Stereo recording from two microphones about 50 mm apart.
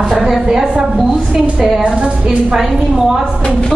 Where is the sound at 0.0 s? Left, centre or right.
Centre.